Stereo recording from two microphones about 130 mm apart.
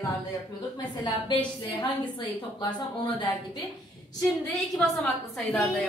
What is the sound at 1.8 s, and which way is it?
A woman's voice, 35° left (ahead or behind).